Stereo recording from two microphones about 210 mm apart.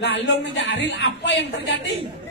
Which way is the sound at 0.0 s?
55° left (ahead or behind).